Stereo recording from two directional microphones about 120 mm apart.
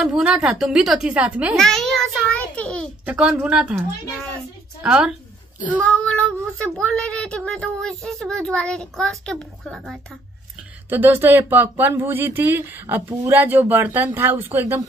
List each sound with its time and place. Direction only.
0.0 s speech: 5° right (ahead or behind)
1.6 s a child's voice: 5° left (ahead or behind)
3.1 s speech: 10° right (ahead or behind)
4.8 s speech: 5° right (ahead or behind)
5.8 s a child's voice: 10° left (ahead or behind)
10.9 s speech: 20° right (ahead or behind)